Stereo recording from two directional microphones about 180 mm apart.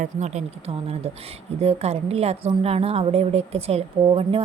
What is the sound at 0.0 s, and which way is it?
Speech, 40° right (ahead or behind).